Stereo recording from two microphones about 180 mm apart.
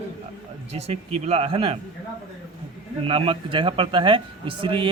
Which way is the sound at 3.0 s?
30° right (ahead or behind).